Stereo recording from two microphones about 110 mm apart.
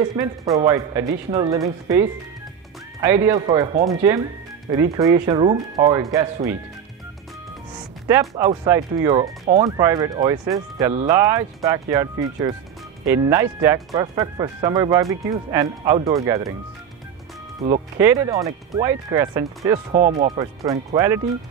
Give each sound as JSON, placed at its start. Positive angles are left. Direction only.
{"t": 0.0, "sound": "speech", "side_deg": -35}
{"t": 3.3, "sound": "speech", "side_deg": -40}
{"t": 8.1, "sound": "speech", "side_deg": -30}
{"t": 18.0, "sound": "speech", "side_deg": -30}
{"t": 20.9, "sound": "speech", "side_deg": -25}